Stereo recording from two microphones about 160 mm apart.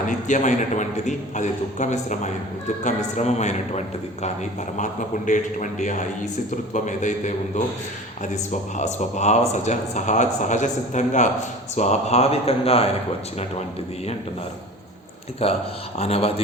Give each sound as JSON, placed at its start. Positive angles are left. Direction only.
{"t": 0.1, "sound": "a man's voice", "side_deg": 50}
{"t": 8.8, "sound": "a man's voice", "side_deg": 45}
{"t": 15.4, "sound": "speech", "side_deg": 40}